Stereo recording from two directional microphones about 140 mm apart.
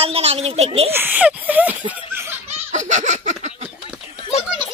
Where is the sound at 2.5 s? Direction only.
60° right (ahead or behind).